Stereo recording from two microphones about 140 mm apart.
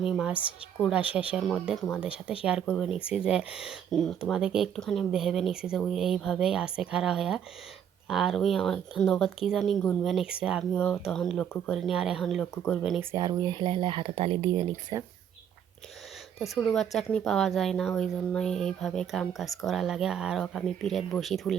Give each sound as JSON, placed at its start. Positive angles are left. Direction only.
{"t": 0.1, "sound": "a woman's voice", "side_deg": -5}
{"t": 13.0, "sound": "speech", "side_deg": -15}
{"t": 13.4, "sound": "speech", "side_deg": -35}
{"t": 14.7, "sound": "speech", "side_deg": -20}
{"t": 16.6, "sound": "a woman's voice", "side_deg": 5}